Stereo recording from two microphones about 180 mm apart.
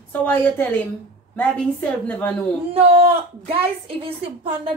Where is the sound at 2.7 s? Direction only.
30° right (ahead or behind).